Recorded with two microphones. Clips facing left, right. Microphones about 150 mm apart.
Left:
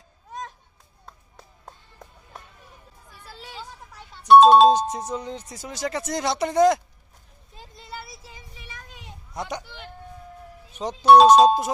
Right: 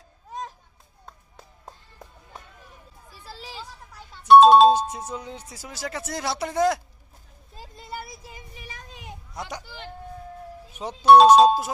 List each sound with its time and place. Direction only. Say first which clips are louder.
1.6 s music: even; 5° right (ahead or behind)
3.2 s a sound: right 2 dB; 30° right (ahead or behind)
4.3 s music: even; centre (ahead or behind)
5.1 s speech: left 4 dB; 10° right (ahead or behind)
7.6 s vehicle: right 3 dB; 5° right (ahead or behind)
9.3 s a sound: left 4 dB; centre (ahead or behind)
10.8 s speech: even; 5° right (ahead or behind)